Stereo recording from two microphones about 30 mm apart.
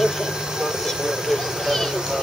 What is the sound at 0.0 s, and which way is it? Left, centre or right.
Vehicle, right.